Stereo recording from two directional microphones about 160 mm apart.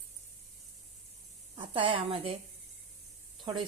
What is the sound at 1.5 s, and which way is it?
Speech, 35° right (ahead or behind).